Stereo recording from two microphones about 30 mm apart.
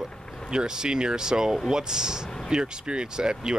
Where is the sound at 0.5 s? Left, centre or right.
Right.